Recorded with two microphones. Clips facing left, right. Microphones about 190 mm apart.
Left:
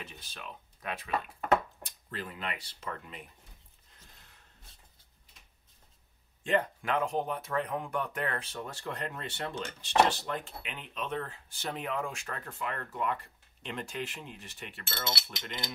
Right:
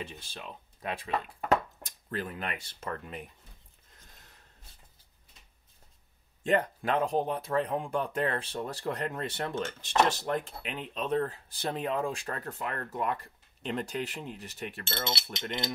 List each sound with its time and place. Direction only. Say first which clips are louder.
0.2 s speech: right 2 dB; 30° right (ahead or behind)
1.8 s speech: right 5 dB; 45° right (ahead or behind)
6.4 s speech: right 2 dB; 35° right (ahead or behind)
14.9 s cutlery: right 1 dB; 20° right (ahead or behind)